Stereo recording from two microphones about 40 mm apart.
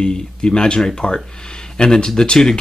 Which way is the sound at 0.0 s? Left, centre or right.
Centre.